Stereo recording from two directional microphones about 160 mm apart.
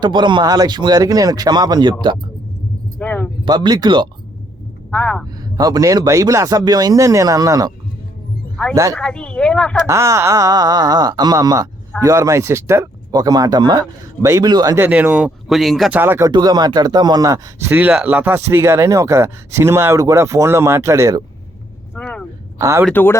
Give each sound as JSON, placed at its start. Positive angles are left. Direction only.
{"t": 0.0, "sound": "speech", "side_deg": -30}
{"t": 3.0, "sound": "speech", "side_deg": 10}
{"t": 3.4, "sound": "speech", "side_deg": -25}
{"t": 4.9, "sound": "speech", "side_deg": 10}
{"t": 5.5, "sound": "speech", "side_deg": -25}
{"t": 8.7, "sound": "speech", "side_deg": -20}
{"t": 9.0, "sound": "speech", "side_deg": 5}
{"t": 9.8, "sound": "speech", "side_deg": -20}
{"t": 14.8, "sound": "speech", "side_deg": -10}
{"t": 16.0, "sound": "speech", "side_deg": -15}
{"t": 16.3, "sound": "speech", "side_deg": -25}
{"t": 21.9, "sound": "a sound", "side_deg": 5}
{"t": 22.5, "sound": "speech", "side_deg": -20}
{"t": 22.9, "sound": "speech", "side_deg": 10}